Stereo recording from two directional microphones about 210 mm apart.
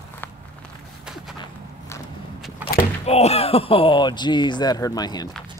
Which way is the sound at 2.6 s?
10° right (ahead or behind).